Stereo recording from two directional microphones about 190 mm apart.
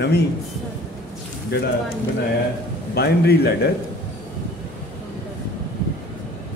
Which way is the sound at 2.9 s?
60° left (ahead or behind).